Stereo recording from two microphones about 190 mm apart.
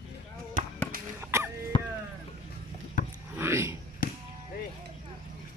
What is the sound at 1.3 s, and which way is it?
Throat clearing, 15° right (ahead or behind).